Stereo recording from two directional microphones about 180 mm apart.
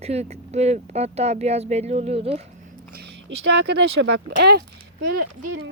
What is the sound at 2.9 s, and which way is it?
Speech, 65° right (ahead or behind).